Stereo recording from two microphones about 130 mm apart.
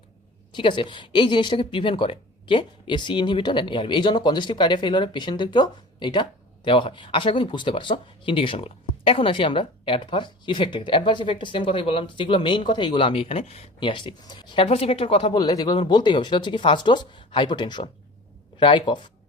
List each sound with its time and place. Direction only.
0.5 s speech: 40° left (ahead or behind)
15.3 s speech: 30° left (ahead or behind)